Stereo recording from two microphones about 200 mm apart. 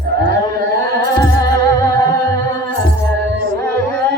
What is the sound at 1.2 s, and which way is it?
Music, 15° left (ahead or behind).